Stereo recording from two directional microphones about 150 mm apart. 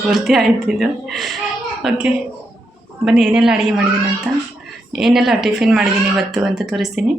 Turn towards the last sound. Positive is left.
turn(degrees=0)  # may be behind; listen again after turning